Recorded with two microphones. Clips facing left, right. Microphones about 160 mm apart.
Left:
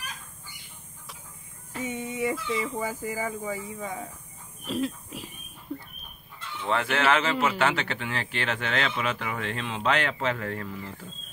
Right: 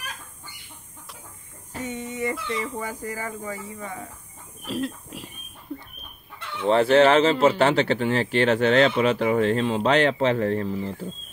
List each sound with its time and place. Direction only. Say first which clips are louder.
1.8 s a sound: right 1 dB; 10° left (ahead or behind)
2.3 s speech: even; 70° right (ahead or behind)
2.6 s speech: even; 5° left (ahead or behind)
4.6 s speech: right 1 dB; centre (ahead or behind)
6.4 s chicken: right 9 dB; 65° right (ahead or behind)
6.7 s a man's voice: right 8 dB; 35° right (ahead or behind)